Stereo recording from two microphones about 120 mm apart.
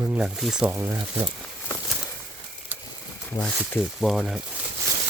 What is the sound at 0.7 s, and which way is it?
Speech, 25° right (ahead or behind).